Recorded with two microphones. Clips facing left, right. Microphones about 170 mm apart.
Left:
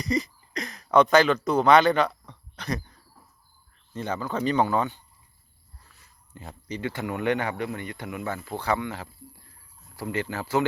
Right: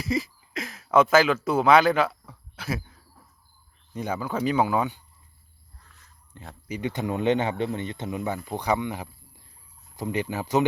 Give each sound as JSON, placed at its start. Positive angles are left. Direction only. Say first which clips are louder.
{"t": 0.0, "sound": "speech", "louder": "even", "side_deg": -5}
{"t": 5.9, "sound": "a sound", "louder": "left 2 dB", "side_deg": 5}
{"t": 6.7, "sound": "speech", "louder": "right 2 dB", "side_deg": -20}